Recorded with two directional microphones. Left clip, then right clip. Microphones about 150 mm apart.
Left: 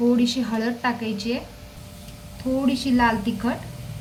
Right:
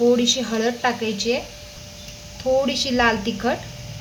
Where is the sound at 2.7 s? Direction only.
45° right (ahead or behind).